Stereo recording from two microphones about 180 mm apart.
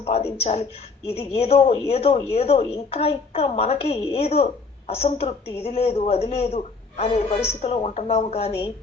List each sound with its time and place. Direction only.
0.0 s a woman's voice: 35° left (ahead or behind)